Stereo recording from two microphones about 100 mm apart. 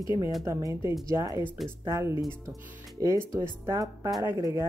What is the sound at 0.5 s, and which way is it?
Speech, 30° right (ahead or behind).